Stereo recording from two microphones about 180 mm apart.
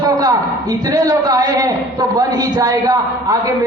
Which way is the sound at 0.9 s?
20° right (ahead or behind).